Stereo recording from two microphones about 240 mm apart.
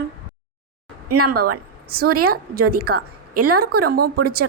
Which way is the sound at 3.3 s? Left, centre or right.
Right.